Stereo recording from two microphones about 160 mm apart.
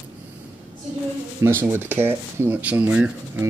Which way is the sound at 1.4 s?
15° right (ahead or behind).